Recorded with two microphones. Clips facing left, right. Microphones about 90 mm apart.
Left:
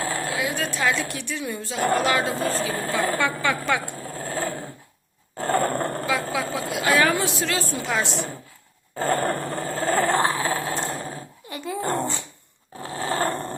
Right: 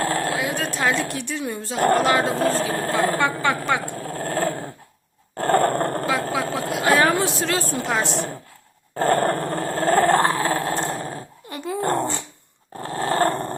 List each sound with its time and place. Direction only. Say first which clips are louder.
0.0 s a sound: right 3 dB; 55° right (ahead or behind)
1.0 s speech: right 3 dB; 45° right (ahead or behind)
2.9 s speech: right 3 dB; 35° right (ahead or behind)
3.9 s dog: right 4 dB; 55° right (ahead or behind)